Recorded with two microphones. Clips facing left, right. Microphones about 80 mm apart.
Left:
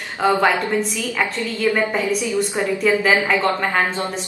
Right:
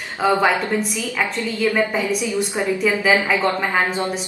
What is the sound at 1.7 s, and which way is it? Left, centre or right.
A woman's voice, centre.